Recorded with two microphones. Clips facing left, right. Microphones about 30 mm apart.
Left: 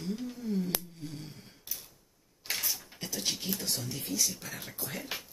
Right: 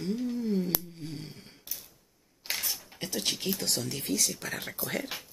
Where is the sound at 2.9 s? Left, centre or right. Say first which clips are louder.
Right 4 dB; right.